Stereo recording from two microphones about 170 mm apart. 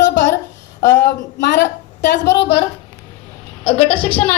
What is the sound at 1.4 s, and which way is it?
A woman's voice, 85° left.